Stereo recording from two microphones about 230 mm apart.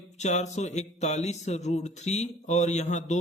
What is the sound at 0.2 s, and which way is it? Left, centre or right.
Speech, left.